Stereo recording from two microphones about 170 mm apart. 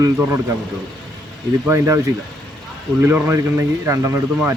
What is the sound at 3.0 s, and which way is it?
A man's voice, 15° right (ahead or behind).